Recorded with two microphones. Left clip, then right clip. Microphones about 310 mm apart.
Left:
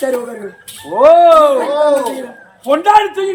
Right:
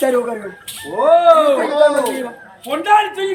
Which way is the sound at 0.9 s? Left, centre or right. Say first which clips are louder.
Left 8 dB; left.